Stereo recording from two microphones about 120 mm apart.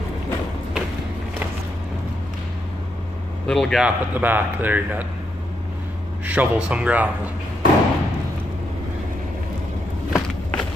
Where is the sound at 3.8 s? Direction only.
15° right (ahead or behind).